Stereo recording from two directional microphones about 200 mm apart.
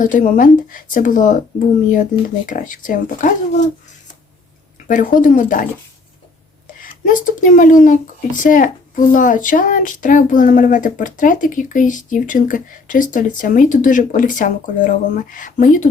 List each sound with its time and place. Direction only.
0.0 s speech: 40° left (ahead or behind)
4.9 s speech: 40° left (ahead or behind)
7.0 s speech: 40° left (ahead or behind)